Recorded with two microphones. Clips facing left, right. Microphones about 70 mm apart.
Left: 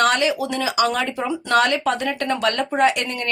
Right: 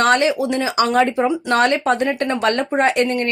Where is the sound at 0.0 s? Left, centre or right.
Right.